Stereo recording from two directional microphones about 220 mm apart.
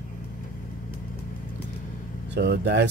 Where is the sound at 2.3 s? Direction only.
50° right (ahead or behind).